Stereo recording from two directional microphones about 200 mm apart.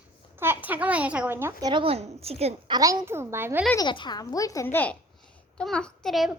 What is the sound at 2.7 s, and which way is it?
Speech, 15° right (ahead or behind).